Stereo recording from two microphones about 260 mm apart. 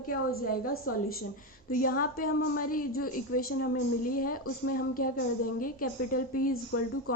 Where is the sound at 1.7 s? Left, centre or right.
Left.